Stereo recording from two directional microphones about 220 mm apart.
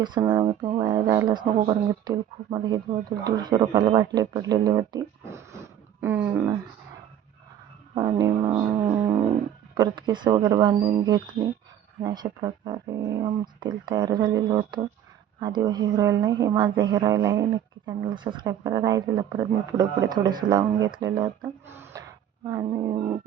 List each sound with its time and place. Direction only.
0.0 s speech: 20° right (ahead or behind)
7.9 s speech: 15° right (ahead or behind)
21.7 s gasp: 10° right (ahead or behind)
22.4 s speech: 15° right (ahead or behind)